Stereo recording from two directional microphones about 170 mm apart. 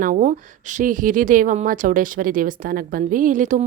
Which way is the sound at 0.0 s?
50° right (ahead or behind).